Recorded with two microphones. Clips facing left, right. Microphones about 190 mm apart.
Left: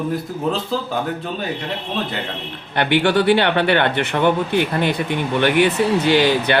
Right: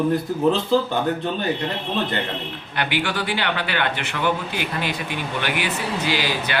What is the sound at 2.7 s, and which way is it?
Speech, 60° left (ahead or behind).